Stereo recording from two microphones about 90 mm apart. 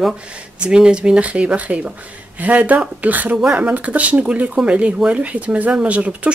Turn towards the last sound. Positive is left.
turn(degrees=-15)  # may be behind; listen again after turning